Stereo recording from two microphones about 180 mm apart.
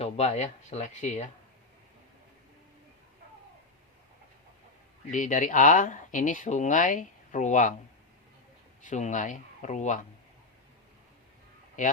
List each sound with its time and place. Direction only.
0.0 s speech: 40° left (ahead or behind)
5.1 s speech: 45° left (ahead or behind)
8.8 s speech: 45° left (ahead or behind)
11.8 s speech: 45° left (ahead or behind)